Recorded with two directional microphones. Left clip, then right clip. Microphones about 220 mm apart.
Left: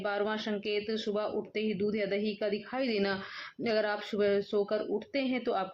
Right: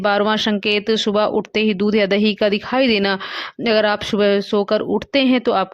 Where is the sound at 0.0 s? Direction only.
50° right (ahead or behind).